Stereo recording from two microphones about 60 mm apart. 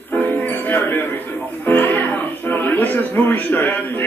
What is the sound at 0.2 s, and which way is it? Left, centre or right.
Music, left.